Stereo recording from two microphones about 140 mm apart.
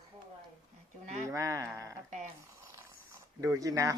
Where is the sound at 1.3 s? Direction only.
25° right (ahead or behind).